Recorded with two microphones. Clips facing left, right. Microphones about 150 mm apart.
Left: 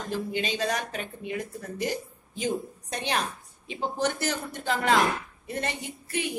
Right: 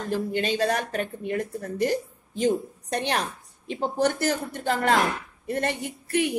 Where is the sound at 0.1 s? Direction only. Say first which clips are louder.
Right 4 dB; 50° right (ahead or behind).